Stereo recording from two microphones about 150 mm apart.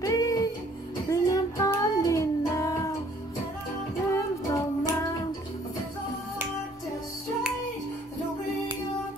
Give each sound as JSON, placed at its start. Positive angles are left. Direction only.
{"t": 0.0, "sound": "music", "side_deg": 25}
{"t": 4.1, "sound": "child singing", "side_deg": 20}